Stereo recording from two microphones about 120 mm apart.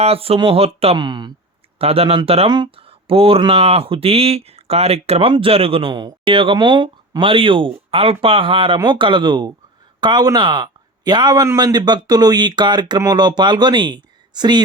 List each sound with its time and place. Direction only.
0.0 s speech: 55° right (ahead or behind)
0.9 s speech: 40° right (ahead or behind)
1.8 s speech: 55° right (ahead or behind)
2.5 s speech: 40° right (ahead or behind)
2.8 s speech: 50° right (ahead or behind)